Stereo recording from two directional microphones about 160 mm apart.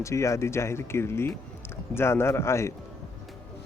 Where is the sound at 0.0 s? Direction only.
20° left (ahead or behind).